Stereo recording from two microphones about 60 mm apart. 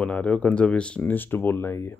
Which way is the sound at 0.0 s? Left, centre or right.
Centre.